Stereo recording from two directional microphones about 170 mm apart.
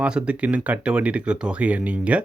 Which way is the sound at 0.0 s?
5° right (ahead or behind).